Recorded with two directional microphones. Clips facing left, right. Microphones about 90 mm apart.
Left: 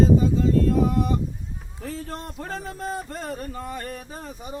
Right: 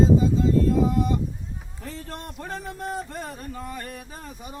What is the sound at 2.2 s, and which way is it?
Speech, 15° left (ahead or behind).